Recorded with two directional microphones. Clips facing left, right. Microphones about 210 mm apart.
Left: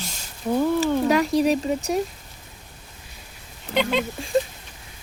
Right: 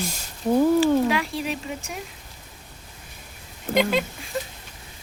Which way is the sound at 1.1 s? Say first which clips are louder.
Left 7 dB; 40° left (ahead or behind).